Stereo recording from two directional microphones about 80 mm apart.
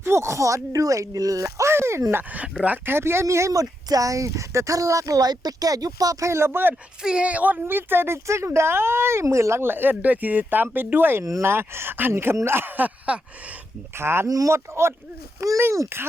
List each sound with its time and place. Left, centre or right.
0.0 s speech: right
7.0 s speech: centre
13.9 s speech: right
14.3 s speech: right